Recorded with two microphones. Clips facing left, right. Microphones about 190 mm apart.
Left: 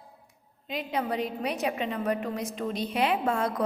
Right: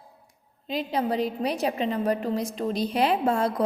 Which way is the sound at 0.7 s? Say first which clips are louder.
Right 4 dB; 35° right (ahead or behind).